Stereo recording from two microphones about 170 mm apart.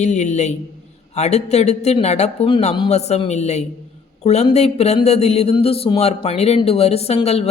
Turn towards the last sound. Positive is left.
turn(degrees=40)  # may be behind; listen again after turning